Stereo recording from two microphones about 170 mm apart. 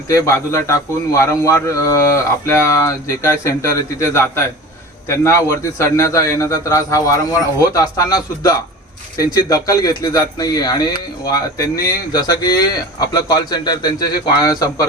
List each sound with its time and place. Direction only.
0.1 s a man's voice: 15° left (ahead or behind)